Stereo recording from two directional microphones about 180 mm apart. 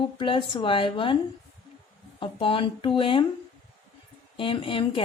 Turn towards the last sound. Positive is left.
turn(degrees=30)  # may be behind; listen again after turning